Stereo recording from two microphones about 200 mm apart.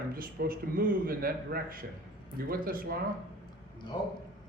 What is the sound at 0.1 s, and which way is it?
Speech, 45° right (ahead or behind).